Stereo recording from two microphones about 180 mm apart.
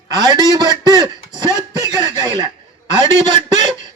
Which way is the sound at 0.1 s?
25° right (ahead or behind).